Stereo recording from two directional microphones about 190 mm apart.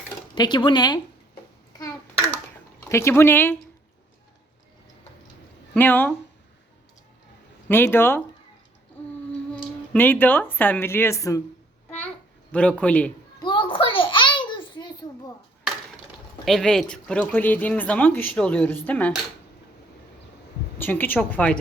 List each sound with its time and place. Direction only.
0.3 s speech: 25° left (ahead or behind)
2.9 s speech: 15° left (ahead or behind)
5.7 s speech: 10° left (ahead or behind)
7.7 s speech: 10° left (ahead or behind)
9.5 s speech: 5° left (ahead or behind)
12.5 s speech: 5° left (ahead or behind)
13.4 s a sound: 25° left (ahead or behind)
16.5 s speech: centre (ahead or behind)
20.7 s speech: 10° left (ahead or behind)